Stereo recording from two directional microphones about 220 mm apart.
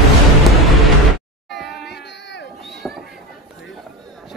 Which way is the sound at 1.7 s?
50° left (ahead or behind).